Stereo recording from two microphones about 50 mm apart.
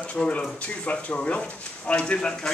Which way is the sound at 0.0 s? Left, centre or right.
Left.